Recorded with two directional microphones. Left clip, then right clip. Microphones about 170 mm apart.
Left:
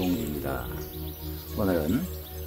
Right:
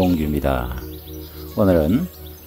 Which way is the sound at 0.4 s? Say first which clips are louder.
Right 11 dB; 55° right (ahead or behind).